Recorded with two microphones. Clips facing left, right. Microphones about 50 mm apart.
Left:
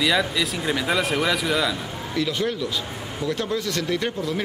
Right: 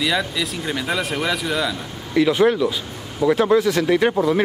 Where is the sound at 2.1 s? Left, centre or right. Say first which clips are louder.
Right 9 dB; right.